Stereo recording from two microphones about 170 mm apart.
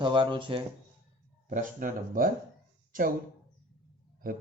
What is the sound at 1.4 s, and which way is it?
Speech, 50° right (ahead or behind).